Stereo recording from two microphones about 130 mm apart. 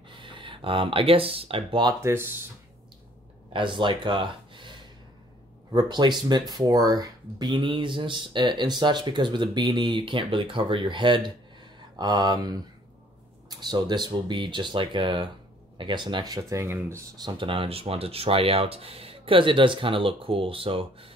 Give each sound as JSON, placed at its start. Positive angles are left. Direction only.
{"t": 0.1, "sound": "speech", "side_deg": -40}
{"t": 2.0, "sound": "speech", "side_deg": -20}
{"t": 3.5, "sound": "speech", "side_deg": -40}
{"t": 17.2, "sound": "speech", "side_deg": -40}